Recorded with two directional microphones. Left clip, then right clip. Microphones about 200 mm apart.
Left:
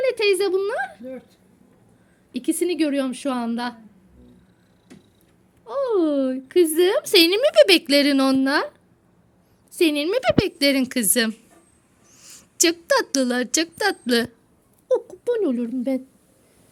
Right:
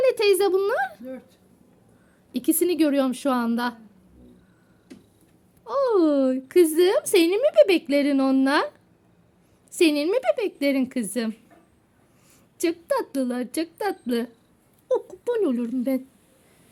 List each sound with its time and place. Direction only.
0.0 s speech: 15° right (ahead or behind)
2.3 s speech: 15° right (ahead or behind)
5.6 s speech: 15° right (ahead or behind)
9.7 s a woman's voice: 10° right (ahead or behind)